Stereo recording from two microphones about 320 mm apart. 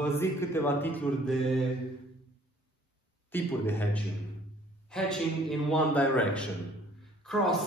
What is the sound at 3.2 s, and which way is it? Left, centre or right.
A man's voice, centre.